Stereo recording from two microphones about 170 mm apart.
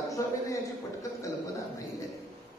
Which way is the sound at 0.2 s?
20° left (ahead or behind).